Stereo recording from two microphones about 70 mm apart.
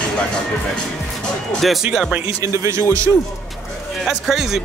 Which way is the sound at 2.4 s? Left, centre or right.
Right.